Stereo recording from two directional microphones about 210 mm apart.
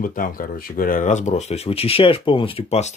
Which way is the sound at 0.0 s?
40° left (ahead or behind).